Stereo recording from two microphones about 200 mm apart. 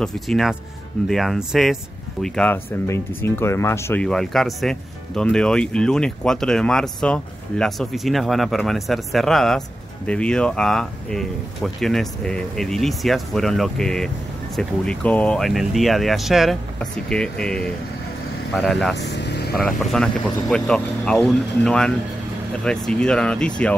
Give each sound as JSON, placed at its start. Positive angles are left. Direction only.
{"t": 0.0, "sound": "speech", "side_deg": 0}
{"t": 18.9, "sound": "vehicle", "side_deg": 55}
{"t": 19.6, "sound": "speech", "side_deg": 5}